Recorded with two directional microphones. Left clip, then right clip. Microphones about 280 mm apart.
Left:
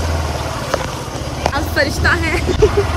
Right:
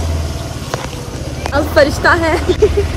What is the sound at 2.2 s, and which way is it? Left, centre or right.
Speech, centre.